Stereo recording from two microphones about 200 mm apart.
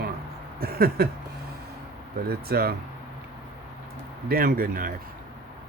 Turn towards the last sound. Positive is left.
turn(degrees=-45)  # may be behind; listen again after turning